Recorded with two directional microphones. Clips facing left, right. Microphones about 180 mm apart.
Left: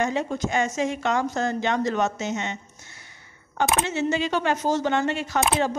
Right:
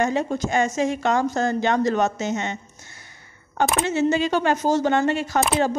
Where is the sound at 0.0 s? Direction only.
40° right (ahead or behind).